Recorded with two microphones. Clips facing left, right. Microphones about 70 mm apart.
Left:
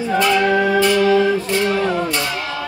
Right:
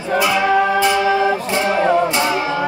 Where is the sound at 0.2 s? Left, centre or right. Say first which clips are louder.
Right 1 dB; centre.